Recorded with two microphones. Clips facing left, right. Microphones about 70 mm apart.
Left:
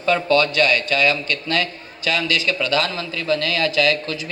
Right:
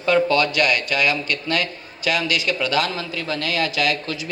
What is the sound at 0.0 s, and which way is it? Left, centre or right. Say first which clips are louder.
A man's voice: even; right.